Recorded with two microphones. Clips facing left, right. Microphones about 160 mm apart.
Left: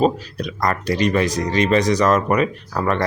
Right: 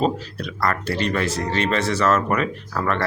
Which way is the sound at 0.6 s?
15° left (ahead or behind).